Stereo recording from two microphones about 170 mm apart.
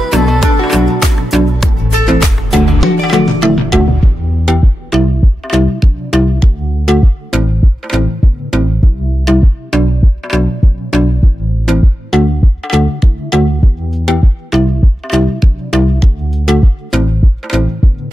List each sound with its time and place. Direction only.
0.0 s music: centre (ahead or behind)